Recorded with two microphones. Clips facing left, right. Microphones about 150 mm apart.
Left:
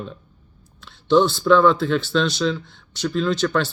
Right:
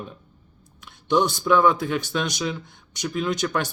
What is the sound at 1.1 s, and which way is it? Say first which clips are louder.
Speech: left 5 dB; 15° right (ahead or behind).